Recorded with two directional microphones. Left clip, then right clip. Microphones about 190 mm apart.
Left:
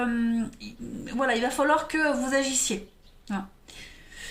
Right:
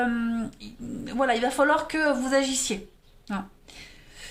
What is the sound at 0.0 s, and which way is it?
A woman's voice, 30° right (ahead or behind).